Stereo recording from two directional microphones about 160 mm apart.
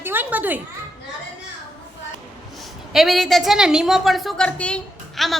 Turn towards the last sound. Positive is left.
turn(degrees=0)  # may be behind; listen again after turning